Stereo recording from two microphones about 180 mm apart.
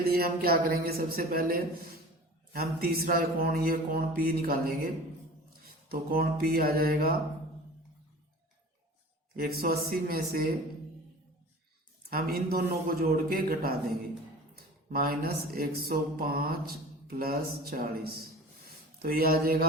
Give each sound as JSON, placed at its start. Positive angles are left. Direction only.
{"t": 0.0, "sound": "speech", "side_deg": -55}
{"t": 9.3, "sound": "speech", "side_deg": -55}
{"t": 12.1, "sound": "speech", "side_deg": -55}
{"t": 18.6, "sound": "a sound", "side_deg": -60}